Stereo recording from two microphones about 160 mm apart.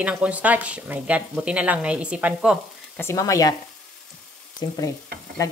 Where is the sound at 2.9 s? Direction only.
15° left (ahead or behind).